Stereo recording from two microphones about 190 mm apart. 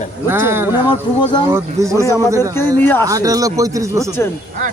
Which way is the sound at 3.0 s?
20° right (ahead or behind).